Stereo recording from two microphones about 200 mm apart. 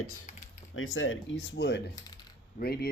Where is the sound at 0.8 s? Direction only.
80° left.